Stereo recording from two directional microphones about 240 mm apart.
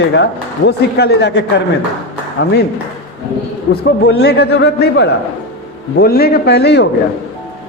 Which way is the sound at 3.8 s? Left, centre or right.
Left.